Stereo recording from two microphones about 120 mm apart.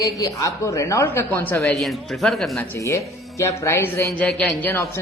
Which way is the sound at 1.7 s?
5° left (ahead or behind).